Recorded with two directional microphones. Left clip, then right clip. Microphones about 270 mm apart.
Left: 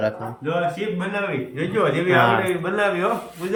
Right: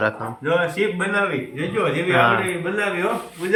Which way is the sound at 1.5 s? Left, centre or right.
Centre.